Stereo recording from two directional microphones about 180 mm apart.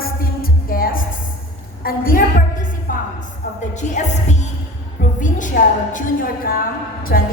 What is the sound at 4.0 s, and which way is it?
Music, 40° left (ahead or behind).